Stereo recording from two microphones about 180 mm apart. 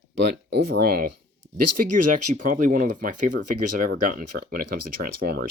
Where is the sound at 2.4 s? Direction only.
45° right (ahead or behind).